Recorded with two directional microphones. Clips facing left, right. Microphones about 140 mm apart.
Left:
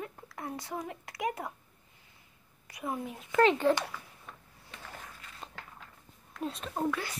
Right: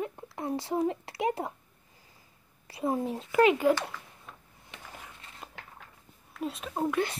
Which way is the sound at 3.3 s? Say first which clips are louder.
Right 2 dB; 10° right (ahead or behind).